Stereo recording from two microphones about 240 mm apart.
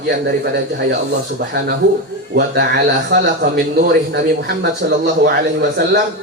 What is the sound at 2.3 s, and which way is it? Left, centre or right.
A man's voice, right.